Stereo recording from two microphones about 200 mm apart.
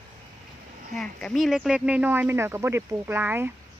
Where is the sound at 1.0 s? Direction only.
Centre (ahead or behind).